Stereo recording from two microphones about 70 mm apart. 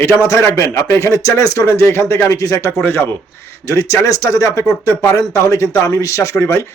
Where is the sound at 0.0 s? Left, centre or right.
Left.